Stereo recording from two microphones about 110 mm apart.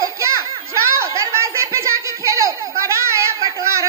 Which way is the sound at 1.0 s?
25° right (ahead or behind).